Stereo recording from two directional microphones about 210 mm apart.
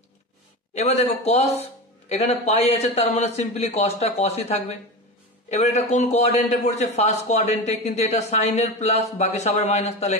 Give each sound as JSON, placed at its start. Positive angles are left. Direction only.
{"t": 0.7, "sound": "a man's voice", "side_deg": 30}